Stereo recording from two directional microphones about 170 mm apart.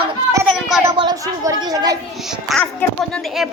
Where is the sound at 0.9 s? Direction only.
25° right (ahead or behind).